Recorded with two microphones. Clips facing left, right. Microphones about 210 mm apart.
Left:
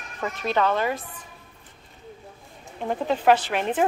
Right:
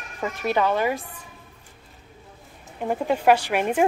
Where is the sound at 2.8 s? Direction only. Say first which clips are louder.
Right 1 dB; 10° right (ahead or behind).